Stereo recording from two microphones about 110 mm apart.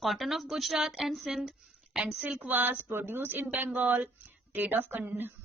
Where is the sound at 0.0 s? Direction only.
Centre (ahead or behind).